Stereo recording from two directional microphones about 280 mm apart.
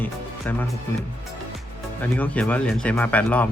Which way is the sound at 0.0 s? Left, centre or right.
Centre.